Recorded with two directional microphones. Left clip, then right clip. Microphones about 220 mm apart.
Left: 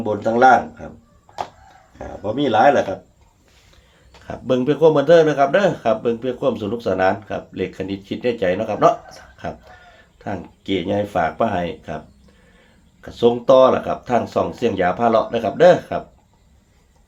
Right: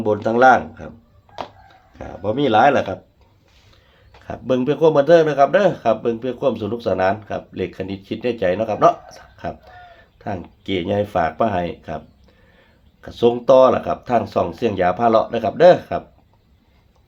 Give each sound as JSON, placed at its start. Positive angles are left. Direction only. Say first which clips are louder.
{"t": 0.0, "sound": "speech", "louder": "right 1 dB", "side_deg": -30}
{"t": 2.0, "sound": "speech", "louder": "right 2 dB", "side_deg": -35}
{"t": 4.2, "sound": "speech", "louder": "even", "side_deg": -10}